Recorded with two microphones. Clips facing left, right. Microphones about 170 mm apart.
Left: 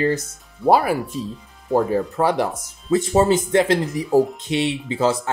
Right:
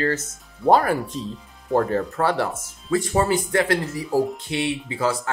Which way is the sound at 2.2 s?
15° left (ahead or behind).